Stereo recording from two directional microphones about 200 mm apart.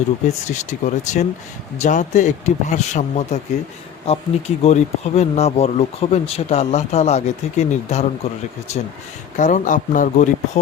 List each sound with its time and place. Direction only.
0.4 s speech: 35° left (ahead or behind)